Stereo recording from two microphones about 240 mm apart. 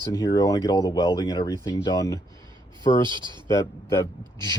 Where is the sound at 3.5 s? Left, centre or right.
Centre.